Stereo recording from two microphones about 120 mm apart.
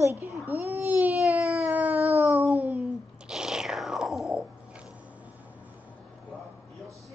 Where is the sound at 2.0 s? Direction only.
60° right (ahead or behind).